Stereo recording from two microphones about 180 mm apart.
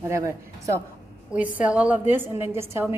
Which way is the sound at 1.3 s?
5° right (ahead or behind).